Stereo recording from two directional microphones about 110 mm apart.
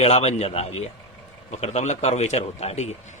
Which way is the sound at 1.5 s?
80° left.